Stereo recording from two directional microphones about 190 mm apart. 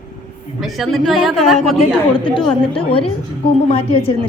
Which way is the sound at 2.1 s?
25° left (ahead or behind).